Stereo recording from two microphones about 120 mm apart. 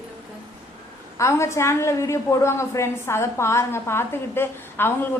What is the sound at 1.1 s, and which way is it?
A woman's voice, 25° left (ahead or behind).